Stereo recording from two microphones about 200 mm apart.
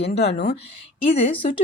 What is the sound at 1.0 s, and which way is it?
Speech, 30° left (ahead or behind).